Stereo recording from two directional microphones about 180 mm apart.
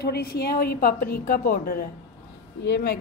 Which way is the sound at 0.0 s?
60° left (ahead or behind).